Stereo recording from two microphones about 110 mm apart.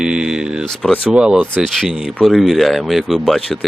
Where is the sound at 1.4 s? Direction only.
5° left (ahead or behind).